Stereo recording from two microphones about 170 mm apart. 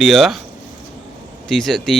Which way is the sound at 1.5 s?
Centre (ahead or behind).